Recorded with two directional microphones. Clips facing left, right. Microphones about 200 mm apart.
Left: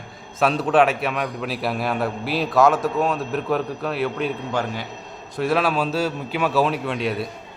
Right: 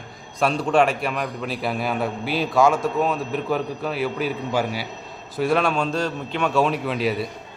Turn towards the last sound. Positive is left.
turn(degrees=0)  # may be behind; listen again after turning